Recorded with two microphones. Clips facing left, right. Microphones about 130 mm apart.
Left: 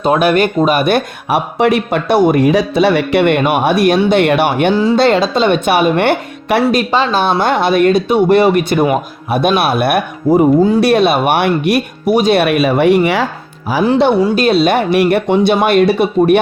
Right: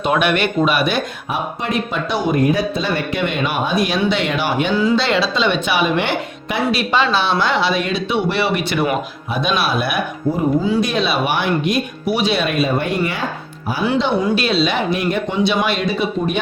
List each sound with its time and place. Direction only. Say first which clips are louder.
0.0 s speech: left 6 dB; 40° left (ahead or behind); by 4.7 s 60° left (ahead or behind)
4.7 s a woman's voice: left 5 dB; 35° left (ahead or behind)
9.3 s speech: left 6 dB; 60° left (ahead or behind)
12.1 s a woman's voice: left 8 dB; 45° left (ahead or behind)
12.4 s speech: left 7 dB; 80° left
14.2 s speech: left 6 dB; 45° left (ahead or behind); by 16.4 s 65° left (ahead or behind)